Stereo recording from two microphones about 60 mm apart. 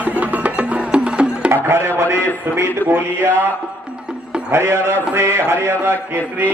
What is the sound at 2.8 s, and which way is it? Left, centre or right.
Mantra, left.